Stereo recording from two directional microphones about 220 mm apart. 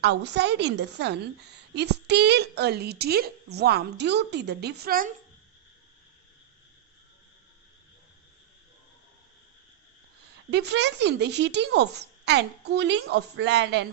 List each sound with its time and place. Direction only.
0.0 s a woman's voice: 50° right (ahead or behind)
10.5 s a woman's voice: 50° right (ahead or behind)